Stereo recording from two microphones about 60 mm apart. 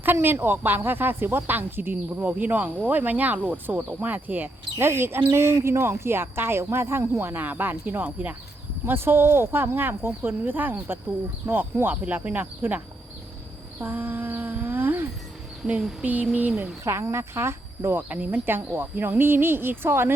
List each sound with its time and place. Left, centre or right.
0.0 s speech: right
4.9 s speech: right
8.9 s speech: right
13.7 s humming: right
16.3 s speech: right
16.8 s speech: right
18.1 s speech: right